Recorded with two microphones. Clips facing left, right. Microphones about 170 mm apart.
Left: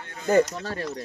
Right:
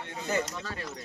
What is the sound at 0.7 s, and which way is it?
Speech, 40° left (ahead or behind).